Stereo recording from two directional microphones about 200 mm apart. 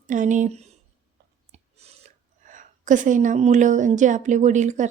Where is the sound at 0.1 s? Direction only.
40° right (ahead or behind).